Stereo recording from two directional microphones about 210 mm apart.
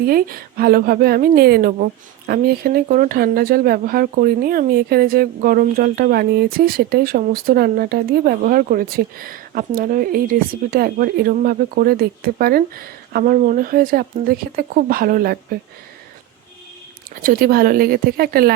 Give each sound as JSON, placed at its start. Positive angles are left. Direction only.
{"t": 0.0, "sound": "a woman's voice", "side_deg": -45}
{"t": 17.2, "sound": "a woman's voice", "side_deg": -45}